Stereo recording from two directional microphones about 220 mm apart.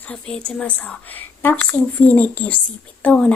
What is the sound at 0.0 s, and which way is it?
A woman's voice, 5° left (ahead or behind).